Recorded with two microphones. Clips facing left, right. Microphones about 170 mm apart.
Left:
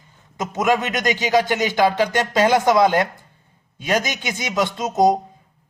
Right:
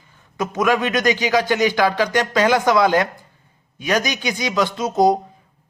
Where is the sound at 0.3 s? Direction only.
20° left (ahead or behind).